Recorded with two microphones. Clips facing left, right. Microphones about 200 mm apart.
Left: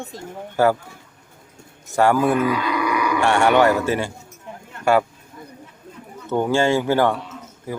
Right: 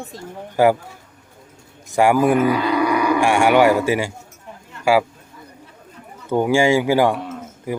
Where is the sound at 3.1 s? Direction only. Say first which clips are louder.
Even; 10° right (ahead or behind).